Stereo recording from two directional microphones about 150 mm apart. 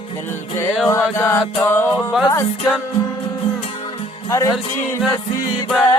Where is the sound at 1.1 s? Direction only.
15° left (ahead or behind).